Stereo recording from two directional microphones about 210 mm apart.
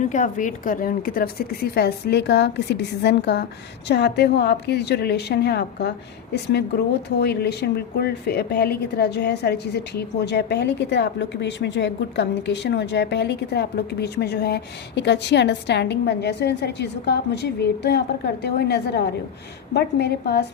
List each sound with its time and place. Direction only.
0.0 s speech: 35° left (ahead or behind); by 20.5 s 50° left (ahead or behind)